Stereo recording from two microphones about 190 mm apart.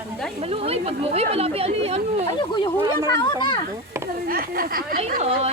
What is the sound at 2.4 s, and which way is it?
Speech, 25° left (ahead or behind).